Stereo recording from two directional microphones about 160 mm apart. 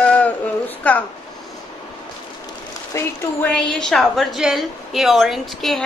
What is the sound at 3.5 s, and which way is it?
A woman's voice, 5° left (ahead or behind).